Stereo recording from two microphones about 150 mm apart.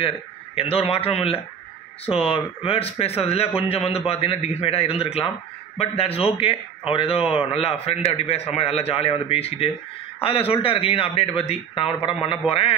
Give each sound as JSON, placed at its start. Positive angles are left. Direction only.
{"t": 0.6, "sound": "a man's voice", "side_deg": 40}